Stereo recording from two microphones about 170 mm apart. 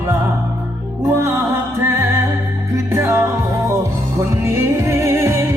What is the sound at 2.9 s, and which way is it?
Music, 15° right (ahead or behind).